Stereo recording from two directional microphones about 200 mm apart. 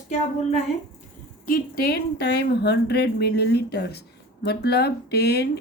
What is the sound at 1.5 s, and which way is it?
Speech, 45° left (ahead or behind).